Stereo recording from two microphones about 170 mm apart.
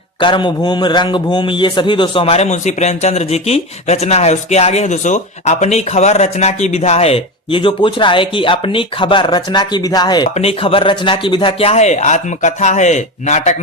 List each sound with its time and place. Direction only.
0.2 s a man's voice: 30° left (ahead or behind); by 13.6 s 45° left (ahead or behind)